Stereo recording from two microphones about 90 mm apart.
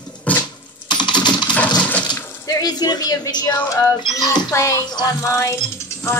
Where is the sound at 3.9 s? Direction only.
55° left (ahead or behind).